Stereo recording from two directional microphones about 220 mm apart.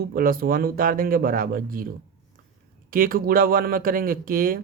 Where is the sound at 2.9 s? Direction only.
40° right (ahead or behind).